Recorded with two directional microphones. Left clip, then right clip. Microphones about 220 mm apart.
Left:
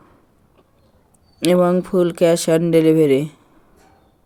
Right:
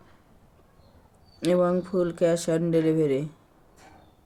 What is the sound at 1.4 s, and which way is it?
Speech, 45° left (ahead or behind).